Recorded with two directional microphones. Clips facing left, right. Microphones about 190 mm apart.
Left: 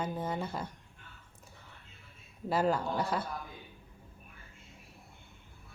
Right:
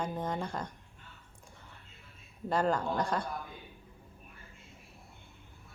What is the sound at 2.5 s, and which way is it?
Speech, 5° left (ahead or behind).